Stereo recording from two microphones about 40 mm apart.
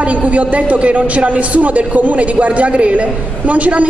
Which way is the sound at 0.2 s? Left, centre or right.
Right.